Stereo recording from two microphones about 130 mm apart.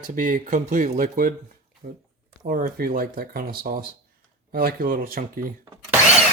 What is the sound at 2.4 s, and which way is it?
Speech, 90° right.